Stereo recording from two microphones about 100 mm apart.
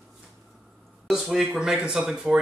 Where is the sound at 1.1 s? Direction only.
5° right (ahead or behind).